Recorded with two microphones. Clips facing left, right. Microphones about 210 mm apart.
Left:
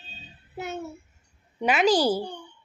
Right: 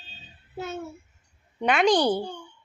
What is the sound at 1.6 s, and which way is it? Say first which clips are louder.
Speech: even; 5° left (ahead or behind).